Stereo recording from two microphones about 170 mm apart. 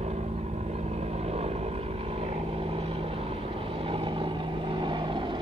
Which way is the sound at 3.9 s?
30° right (ahead or behind).